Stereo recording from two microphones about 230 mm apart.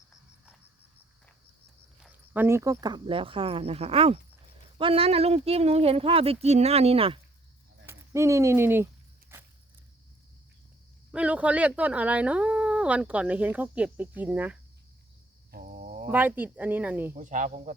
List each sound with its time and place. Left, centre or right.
2.0 s speech: centre; by 7.2 s right
7.9 s speech: centre
11.1 s speech: centre
15.5 s a sound: right
16.0 s speech: centre
17.2 s speech: right